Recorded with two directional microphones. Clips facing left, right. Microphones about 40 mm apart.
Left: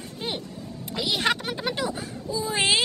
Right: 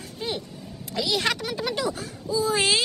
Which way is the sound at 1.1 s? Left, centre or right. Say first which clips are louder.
Left 1 dB; left.